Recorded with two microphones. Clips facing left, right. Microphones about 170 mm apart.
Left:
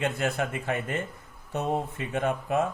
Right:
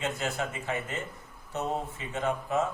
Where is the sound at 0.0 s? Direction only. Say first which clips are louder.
Left 4 dB; 60° left (ahead or behind).